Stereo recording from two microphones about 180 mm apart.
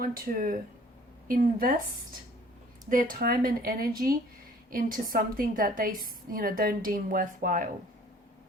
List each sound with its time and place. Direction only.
0.0 s a woman's voice: 50° right (ahead or behind)
2.9 s a woman's voice: 50° right (ahead or behind)